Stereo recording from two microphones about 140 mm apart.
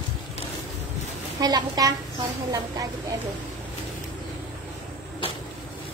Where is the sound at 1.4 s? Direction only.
30° right (ahead or behind).